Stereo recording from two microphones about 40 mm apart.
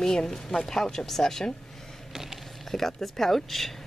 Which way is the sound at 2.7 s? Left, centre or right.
Centre.